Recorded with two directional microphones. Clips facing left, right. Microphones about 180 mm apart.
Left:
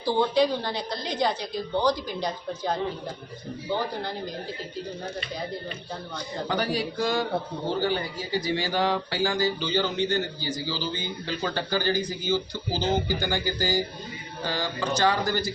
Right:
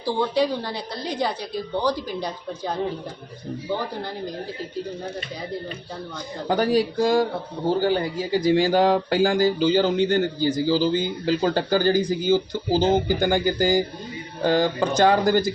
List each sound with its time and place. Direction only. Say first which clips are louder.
0.0 s a woman's voice: even; 10° right (ahead or behind)
6.5 s speech: right 8 dB; 45° right (ahead or behind)